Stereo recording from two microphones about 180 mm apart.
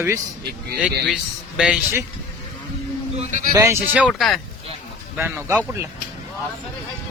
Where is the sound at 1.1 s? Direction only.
5° right (ahead or behind).